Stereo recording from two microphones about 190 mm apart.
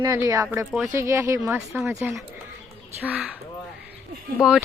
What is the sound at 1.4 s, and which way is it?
Speech, 5° right (ahead or behind).